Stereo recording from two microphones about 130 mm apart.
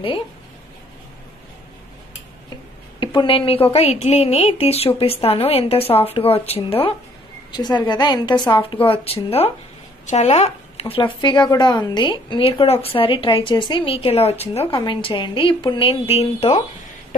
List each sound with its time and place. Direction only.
3.0 s speech: 40° left (ahead or behind)
7.5 s a woman's voice: 35° left (ahead or behind)
8.8 s speech: 45° left (ahead or behind)
10.0 s speech: 60° left (ahead or behind)